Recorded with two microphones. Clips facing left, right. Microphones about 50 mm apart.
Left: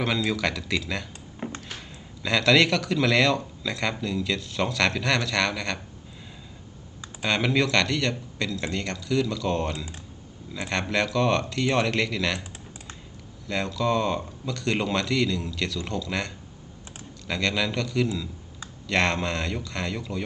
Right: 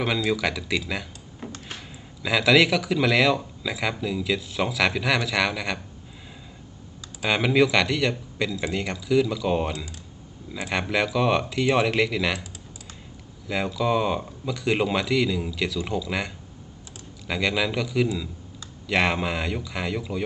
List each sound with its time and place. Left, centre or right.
0.3 s speech: centre
1.4 s a sound: left
2.2 s speech: centre
7.2 s speech: centre
13.5 s speech: centre